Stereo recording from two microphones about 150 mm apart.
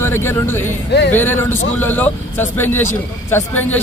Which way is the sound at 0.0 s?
15° left (ahead or behind).